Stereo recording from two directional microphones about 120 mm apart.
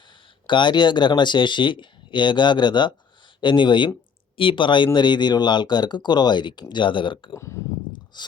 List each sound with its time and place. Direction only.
0.4 s speech: 40° left (ahead or behind)
7.3 s speech: 25° left (ahead or behind)
7.9 s a sound: 40° left (ahead or behind)